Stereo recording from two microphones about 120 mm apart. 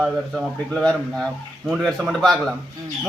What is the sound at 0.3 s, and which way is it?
A man's voice, 5° left (ahead or behind).